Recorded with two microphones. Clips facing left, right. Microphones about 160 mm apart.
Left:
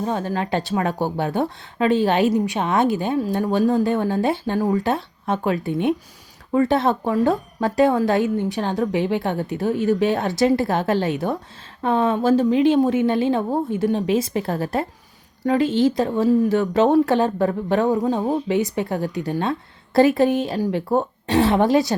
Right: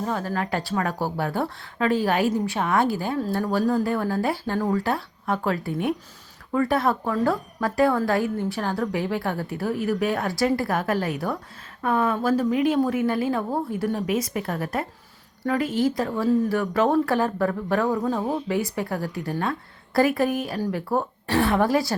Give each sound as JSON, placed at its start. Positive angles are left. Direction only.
{"t": 0.0, "sound": "speech", "side_deg": 20}